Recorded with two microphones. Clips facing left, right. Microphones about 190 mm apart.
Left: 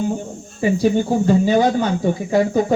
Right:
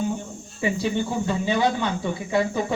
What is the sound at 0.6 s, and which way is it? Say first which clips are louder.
Speech: left 7 dB; 45° left (ahead or behind).